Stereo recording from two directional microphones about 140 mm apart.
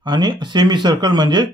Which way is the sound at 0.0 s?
35° right (ahead or behind).